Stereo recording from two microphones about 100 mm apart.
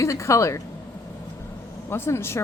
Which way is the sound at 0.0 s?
30° left (ahead or behind).